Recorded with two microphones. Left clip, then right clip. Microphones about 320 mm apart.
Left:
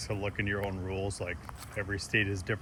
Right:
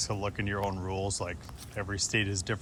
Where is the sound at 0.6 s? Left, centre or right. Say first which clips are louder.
Right 2 dB; right.